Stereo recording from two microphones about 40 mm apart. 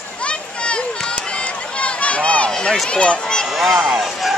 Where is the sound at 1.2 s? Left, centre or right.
Left.